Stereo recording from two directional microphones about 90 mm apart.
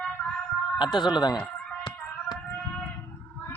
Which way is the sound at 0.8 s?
60° left (ahead or behind).